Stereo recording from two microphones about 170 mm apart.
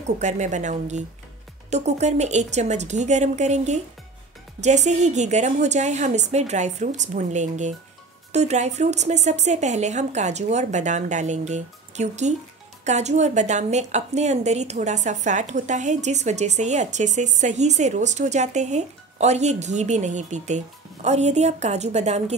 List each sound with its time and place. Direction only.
0.0 s a woman's voice: 45° right (ahead or behind)